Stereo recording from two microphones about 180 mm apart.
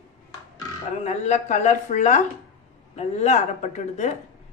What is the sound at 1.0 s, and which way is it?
Speech, 40° left (ahead or behind).